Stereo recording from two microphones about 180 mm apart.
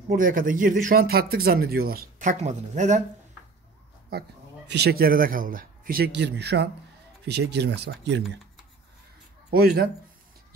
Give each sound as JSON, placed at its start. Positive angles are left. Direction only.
{"t": 0.1, "sound": "speech", "side_deg": -50}
{"t": 4.6, "sound": "speech", "side_deg": -65}
{"t": 9.5, "sound": "speech", "side_deg": -55}